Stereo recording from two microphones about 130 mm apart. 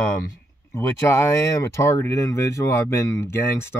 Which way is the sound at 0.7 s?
20° left (ahead or behind).